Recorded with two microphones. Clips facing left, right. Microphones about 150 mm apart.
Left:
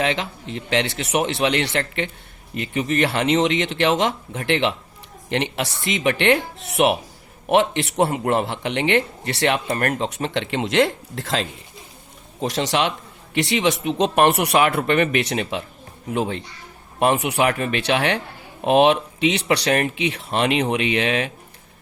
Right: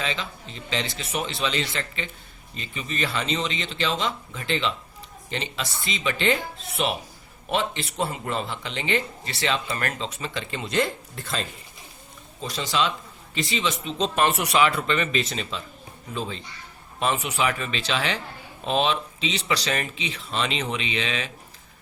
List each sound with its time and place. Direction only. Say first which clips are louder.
0.0 s a man's voice: left 8 dB; 70° left (ahead or behind)